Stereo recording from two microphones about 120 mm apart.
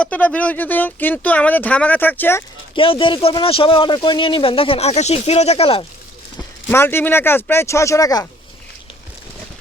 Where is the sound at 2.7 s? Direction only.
45° left (ahead or behind).